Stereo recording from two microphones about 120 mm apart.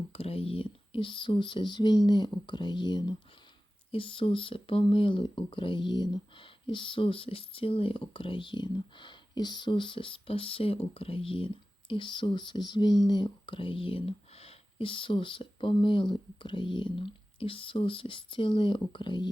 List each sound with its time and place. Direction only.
0.1 s speech: 55° left (ahead or behind)